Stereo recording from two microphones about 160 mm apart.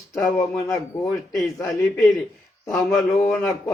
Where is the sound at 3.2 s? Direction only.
10° left (ahead or behind).